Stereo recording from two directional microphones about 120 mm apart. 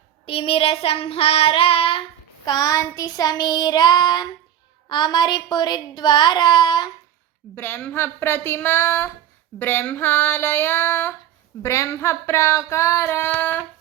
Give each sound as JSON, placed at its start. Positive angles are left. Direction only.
{"t": 0.3, "sound": "child singing", "side_deg": 50}
{"t": 2.5, "sound": "speech", "side_deg": 30}
{"t": 7.5, "sound": "a sound", "side_deg": 20}